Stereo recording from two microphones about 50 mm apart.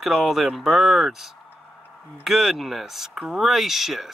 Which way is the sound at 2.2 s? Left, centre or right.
Centre.